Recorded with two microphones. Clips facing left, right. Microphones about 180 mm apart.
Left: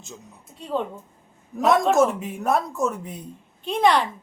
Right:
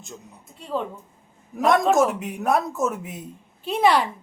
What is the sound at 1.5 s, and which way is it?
A woman's voice, centre (ahead or behind).